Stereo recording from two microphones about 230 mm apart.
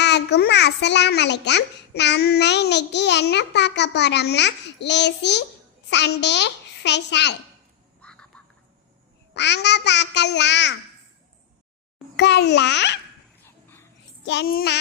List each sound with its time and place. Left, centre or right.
0.0 s a child's voice: left
8.0 s quack: centre
9.3 s a child's voice: left
12.1 s a child's voice: left
13.4 s dog: centre
14.3 s a child's voice: left